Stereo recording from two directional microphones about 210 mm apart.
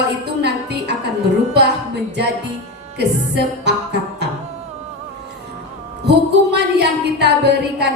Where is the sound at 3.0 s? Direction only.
50° right (ahead or behind).